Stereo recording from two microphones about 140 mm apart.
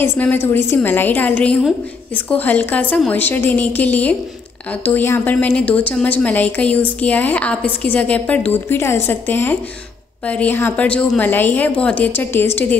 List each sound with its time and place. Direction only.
0.0 s a woman's voice: 15° left (ahead or behind)